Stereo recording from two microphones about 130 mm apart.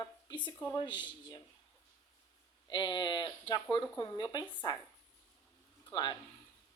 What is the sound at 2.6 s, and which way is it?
Speech, 35° left (ahead or behind).